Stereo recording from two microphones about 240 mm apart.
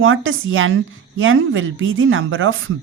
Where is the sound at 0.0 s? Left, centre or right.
Right.